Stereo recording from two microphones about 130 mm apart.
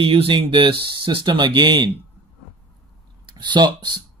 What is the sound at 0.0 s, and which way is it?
Speech, 45° right (ahead or behind).